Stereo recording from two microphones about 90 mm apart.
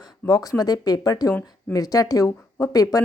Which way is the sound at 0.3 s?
45° left (ahead or behind).